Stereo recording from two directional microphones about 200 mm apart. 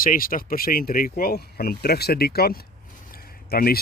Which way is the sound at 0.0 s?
45° left (ahead or behind).